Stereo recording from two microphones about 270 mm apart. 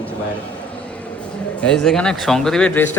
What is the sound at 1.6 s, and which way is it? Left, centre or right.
Speech, centre.